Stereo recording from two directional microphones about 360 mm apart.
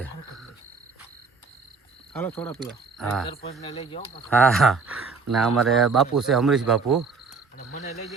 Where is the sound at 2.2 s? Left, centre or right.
Centre.